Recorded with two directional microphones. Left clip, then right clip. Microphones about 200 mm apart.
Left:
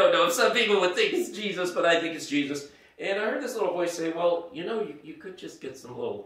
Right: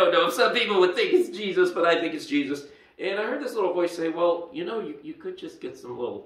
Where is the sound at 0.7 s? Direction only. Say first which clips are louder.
Right 3 dB; 15° left (ahead or behind).